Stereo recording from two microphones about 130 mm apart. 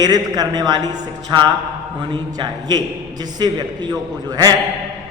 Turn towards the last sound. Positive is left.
turn(degrees=-30)  # may be behind; listen again after turning